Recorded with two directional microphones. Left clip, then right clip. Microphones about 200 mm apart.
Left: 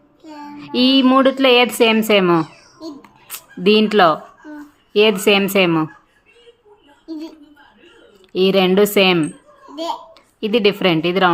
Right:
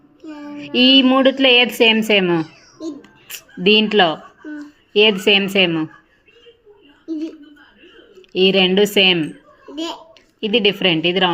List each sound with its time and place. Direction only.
0.5 s speech: 10° left (ahead or behind)
8.3 s speech: 15° left (ahead or behind)
10.4 s speech: 20° left (ahead or behind)